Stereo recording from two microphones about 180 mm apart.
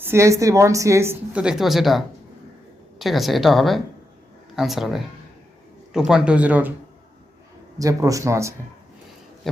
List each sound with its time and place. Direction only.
0.0 s a woman's voice: 15° right (ahead or behind)
7.8 s speech: 20° right (ahead or behind)